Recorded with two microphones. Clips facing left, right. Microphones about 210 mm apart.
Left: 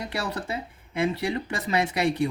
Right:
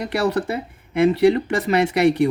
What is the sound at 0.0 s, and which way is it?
Speech, 70° right (ahead or behind).